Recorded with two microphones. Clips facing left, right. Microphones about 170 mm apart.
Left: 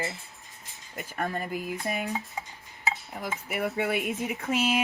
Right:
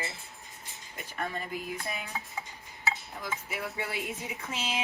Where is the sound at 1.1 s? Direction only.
45° left (ahead or behind).